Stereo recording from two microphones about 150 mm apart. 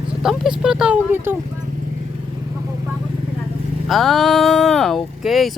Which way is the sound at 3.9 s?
Centre (ahead or behind).